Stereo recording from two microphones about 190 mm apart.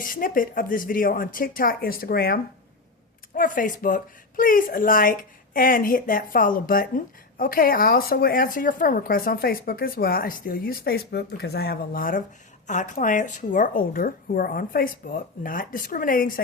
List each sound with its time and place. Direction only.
0.0 s speech: 45° left (ahead or behind)